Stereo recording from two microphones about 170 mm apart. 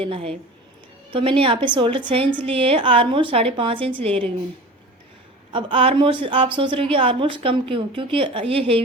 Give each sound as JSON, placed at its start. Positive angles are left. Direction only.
{"t": 0.0, "sound": "a woman's voice", "side_deg": -35}
{"t": 5.5, "sound": "a woman's voice", "side_deg": -30}